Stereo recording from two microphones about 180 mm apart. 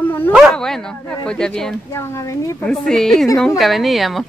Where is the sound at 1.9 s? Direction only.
15° left (ahead or behind).